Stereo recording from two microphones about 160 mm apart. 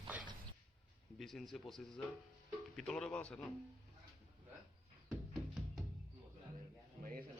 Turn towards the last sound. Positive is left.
turn(degrees=0)  # may be behind; listen again after turning